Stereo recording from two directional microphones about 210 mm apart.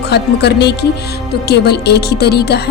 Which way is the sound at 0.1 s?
50° left (ahead or behind).